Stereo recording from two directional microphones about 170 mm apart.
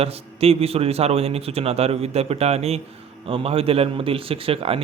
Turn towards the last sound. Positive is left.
turn(degrees=-35)  # may be behind; listen again after turning